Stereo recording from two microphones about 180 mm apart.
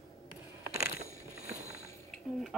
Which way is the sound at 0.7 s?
55° left (ahead or behind).